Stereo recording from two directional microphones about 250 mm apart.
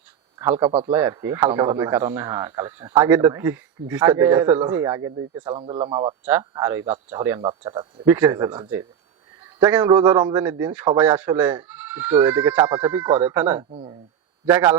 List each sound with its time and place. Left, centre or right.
0.7 s speech: right
0.9 s speech: centre
6.2 s speech: centre
13.7 s speech: right
14.4 s speech: centre